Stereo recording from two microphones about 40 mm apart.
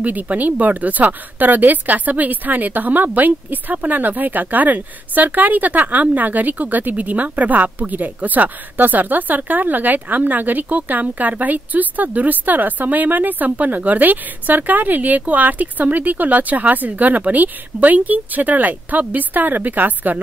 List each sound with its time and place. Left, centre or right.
0.0 s a woman's voice: right